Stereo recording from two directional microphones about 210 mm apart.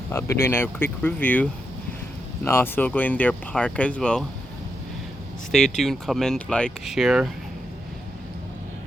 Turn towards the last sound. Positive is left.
turn(degrees=0)  # may be behind; listen again after turning